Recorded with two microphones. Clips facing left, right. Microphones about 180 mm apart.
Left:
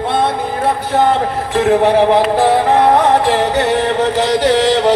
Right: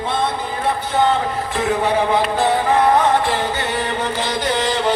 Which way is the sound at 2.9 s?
75° left (ahead or behind).